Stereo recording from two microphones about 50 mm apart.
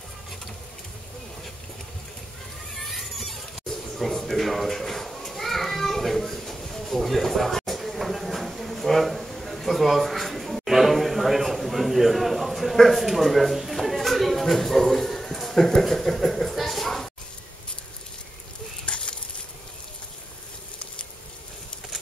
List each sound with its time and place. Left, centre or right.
2.7 s squeal: centre
4.0 s children playing: centre
18.9 s a sound: left